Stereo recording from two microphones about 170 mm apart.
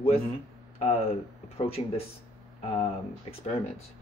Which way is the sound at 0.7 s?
35° left (ahead or behind).